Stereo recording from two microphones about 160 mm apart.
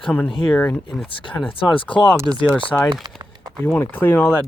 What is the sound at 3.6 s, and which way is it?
Speech, 15° left (ahead or behind).